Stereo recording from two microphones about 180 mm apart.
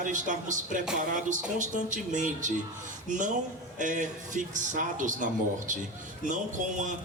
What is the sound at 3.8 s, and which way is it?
A man's voice, 45° right (ahead or behind).